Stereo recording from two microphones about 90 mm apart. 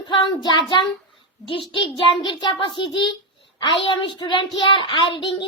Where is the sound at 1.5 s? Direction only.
70° left (ahead or behind); by 2.6 s 55° left (ahead or behind).